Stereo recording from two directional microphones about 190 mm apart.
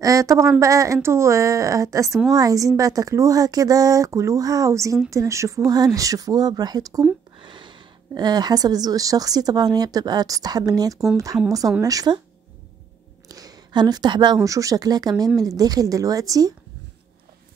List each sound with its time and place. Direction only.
0.0 s a woman's voice: 20° right (ahead or behind)
13.3 s speech: 20° right (ahead or behind)